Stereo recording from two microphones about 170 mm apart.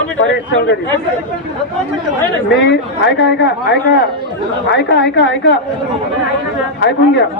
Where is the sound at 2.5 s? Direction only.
90° left.